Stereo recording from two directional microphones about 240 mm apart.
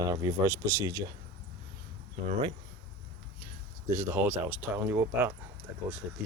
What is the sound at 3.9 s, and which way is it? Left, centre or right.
Speech, centre.